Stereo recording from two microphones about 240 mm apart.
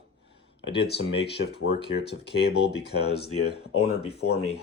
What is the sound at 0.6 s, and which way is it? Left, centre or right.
Speech, left.